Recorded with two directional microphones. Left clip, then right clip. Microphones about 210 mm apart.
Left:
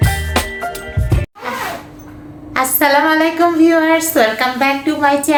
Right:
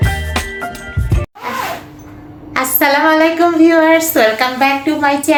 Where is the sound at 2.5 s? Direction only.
Centre (ahead or behind).